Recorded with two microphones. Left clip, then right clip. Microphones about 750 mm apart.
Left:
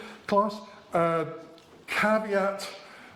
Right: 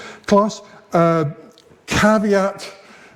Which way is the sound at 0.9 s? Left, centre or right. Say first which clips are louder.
Right 9 dB; right.